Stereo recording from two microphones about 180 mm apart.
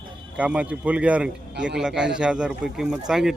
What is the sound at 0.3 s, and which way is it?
Speech, 5° right (ahead or behind).